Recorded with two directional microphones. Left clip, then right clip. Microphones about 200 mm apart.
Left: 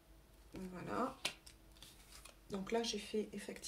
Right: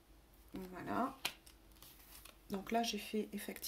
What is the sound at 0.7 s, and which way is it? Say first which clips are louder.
Speech: right 2 dB; 40° right (ahead or behind).